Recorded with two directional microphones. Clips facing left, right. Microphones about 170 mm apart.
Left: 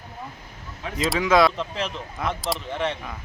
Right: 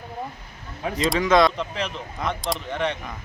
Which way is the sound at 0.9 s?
5° left (ahead or behind).